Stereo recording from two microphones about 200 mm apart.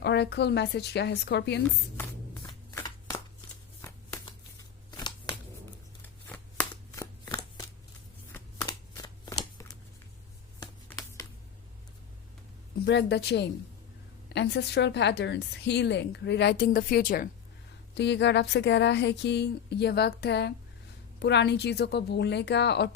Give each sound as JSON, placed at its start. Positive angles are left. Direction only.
{"t": 0.0, "sound": "a woman's voice", "side_deg": 55}
{"t": 2.3, "sound": "shuffling cards", "side_deg": 15}
{"t": 6.0, "sound": "shuffling cards", "side_deg": 10}
{"t": 12.8, "sound": "a woman's voice", "side_deg": 60}
{"t": 17.9, "sound": "a woman's voice", "side_deg": 60}